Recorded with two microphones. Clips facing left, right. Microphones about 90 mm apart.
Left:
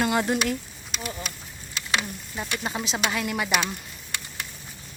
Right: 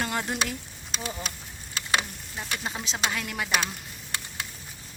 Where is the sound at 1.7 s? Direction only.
35° right (ahead or behind).